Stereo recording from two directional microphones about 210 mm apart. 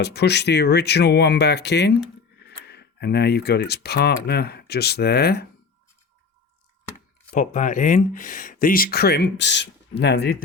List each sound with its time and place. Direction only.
0.0 s speech: 55° left (ahead or behind)
7.3 s speech: 35° left (ahead or behind); by 10.3 s 50° left (ahead or behind)